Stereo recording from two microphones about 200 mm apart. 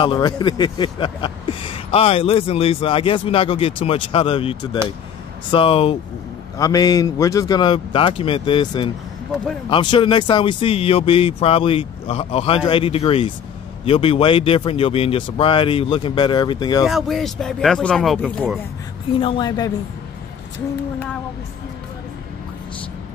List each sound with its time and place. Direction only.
0.0 s speech: 25° left (ahead or behind)
16.8 s speech: centre (ahead or behind)
19.1 s speech: 25° left (ahead or behind)